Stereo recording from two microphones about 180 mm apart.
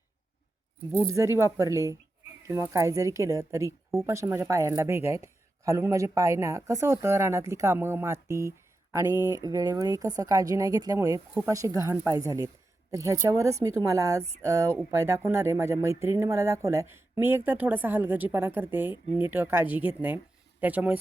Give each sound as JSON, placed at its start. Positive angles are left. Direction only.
{"t": 0.9, "sound": "speech", "side_deg": -15}